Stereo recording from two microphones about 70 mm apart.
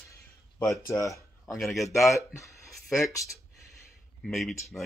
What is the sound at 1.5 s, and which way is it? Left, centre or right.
Speech, centre.